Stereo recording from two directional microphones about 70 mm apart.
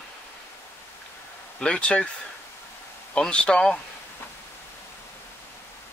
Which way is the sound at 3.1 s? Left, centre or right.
Centre.